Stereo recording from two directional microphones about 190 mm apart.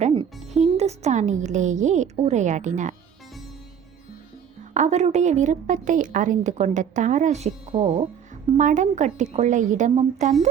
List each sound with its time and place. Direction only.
0.0 s speech: 30° right (ahead or behind)
4.7 s a woman's voice: 40° right (ahead or behind)